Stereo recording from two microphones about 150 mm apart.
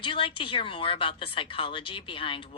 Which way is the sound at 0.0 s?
35° left (ahead or behind).